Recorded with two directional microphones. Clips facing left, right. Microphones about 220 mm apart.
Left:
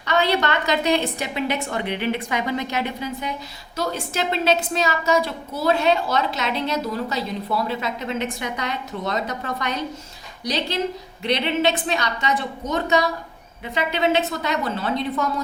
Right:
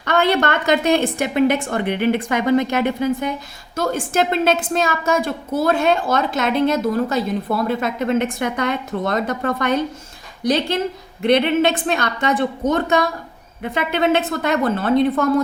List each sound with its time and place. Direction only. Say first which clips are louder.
0.0 s a woman's voice: right 3 dB; 50° right (ahead or behind)